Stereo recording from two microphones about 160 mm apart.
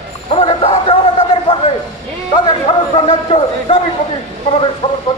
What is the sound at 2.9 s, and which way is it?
Speech, 35° left (ahead or behind).